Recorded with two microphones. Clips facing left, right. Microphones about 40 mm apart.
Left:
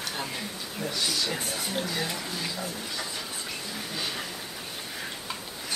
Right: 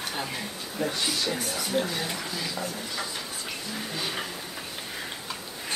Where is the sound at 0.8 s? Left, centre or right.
Right.